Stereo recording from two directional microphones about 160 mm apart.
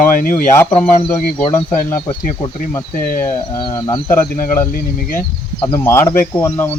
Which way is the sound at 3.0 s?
65° left (ahead or behind).